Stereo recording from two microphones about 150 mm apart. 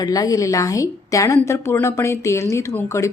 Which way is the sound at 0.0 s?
25° left (ahead or behind).